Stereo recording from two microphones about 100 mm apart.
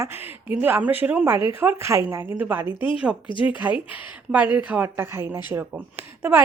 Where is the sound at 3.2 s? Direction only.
55° left (ahead or behind).